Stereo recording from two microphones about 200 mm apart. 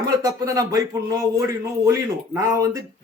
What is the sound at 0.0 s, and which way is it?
Speech, 20° right (ahead or behind).